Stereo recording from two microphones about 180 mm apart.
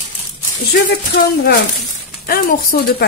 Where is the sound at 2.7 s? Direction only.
60° left (ahead or behind).